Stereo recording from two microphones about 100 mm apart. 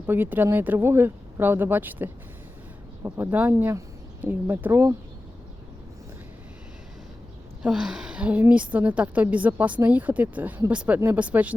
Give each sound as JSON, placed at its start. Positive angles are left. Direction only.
{"t": 0.1, "sound": "a woman's voice", "side_deg": -20}
{"t": 3.5, "sound": "speech", "side_deg": -25}
{"t": 7.6, "sound": "a woman's voice", "side_deg": -5}